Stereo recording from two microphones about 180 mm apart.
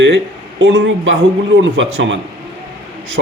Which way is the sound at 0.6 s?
90° right.